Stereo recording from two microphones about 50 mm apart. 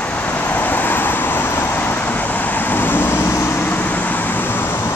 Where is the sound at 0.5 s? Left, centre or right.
Left.